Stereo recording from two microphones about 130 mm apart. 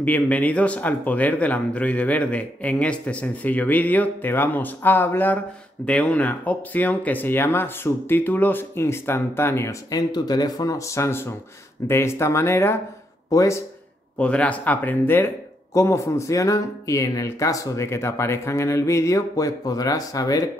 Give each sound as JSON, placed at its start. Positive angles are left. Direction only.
{"t": 0.0, "sound": "speech", "side_deg": 10}
{"t": 14.1, "sound": "speech", "side_deg": 10}